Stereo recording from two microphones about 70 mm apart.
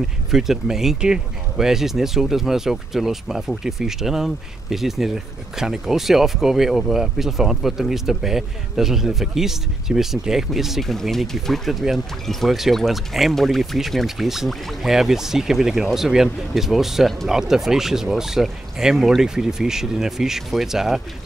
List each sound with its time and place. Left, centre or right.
0.3 s speech: centre